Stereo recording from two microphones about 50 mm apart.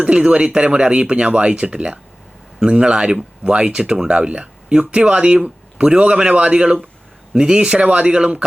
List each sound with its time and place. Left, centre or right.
0.0 s speech: right